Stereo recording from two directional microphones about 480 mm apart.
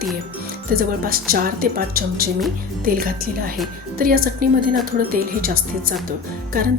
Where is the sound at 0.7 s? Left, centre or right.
Centre.